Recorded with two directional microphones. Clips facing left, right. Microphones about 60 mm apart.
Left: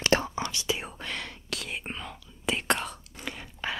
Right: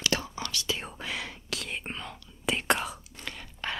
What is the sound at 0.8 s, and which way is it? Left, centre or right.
Whispering, centre.